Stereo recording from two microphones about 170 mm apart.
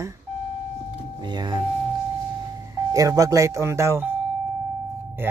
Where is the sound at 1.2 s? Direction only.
25° right (ahead or behind).